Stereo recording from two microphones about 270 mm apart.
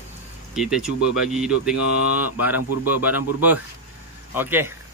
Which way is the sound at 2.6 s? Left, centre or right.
Left.